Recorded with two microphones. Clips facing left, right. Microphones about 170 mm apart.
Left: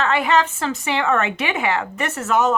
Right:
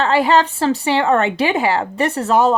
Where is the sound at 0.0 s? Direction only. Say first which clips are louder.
Right 4 dB; 30° right (ahead or behind).